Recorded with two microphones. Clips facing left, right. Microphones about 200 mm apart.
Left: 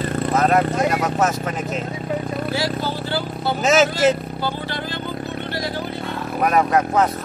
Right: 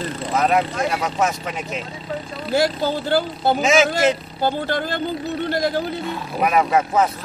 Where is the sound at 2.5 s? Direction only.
50° right (ahead or behind).